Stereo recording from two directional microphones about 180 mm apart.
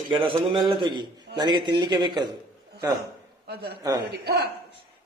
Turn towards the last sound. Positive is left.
turn(degrees=-65)  # may be behind; listen again after turning